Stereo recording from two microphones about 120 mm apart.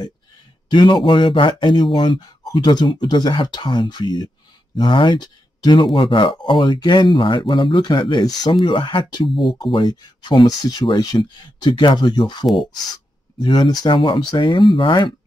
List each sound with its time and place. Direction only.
0.7 s speech: 40° left (ahead or behind)